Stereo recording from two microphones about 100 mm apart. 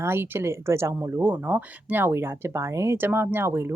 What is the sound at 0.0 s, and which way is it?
Speech, 25° right (ahead or behind).